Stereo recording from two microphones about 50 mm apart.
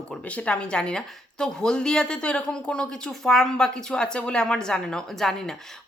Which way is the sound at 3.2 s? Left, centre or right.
Centre.